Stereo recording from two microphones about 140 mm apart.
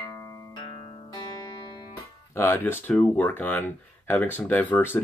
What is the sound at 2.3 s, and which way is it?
Speech, 15° left (ahead or behind).